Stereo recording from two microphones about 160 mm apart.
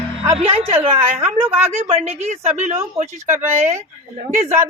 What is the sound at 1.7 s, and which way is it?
A woman's voice, 40° right (ahead or behind).